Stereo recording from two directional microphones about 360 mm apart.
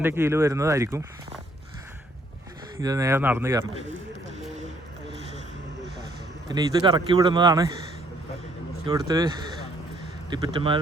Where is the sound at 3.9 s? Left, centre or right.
Right.